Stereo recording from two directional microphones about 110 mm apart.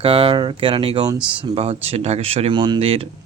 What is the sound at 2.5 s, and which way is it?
Speech, 45° right (ahead or behind).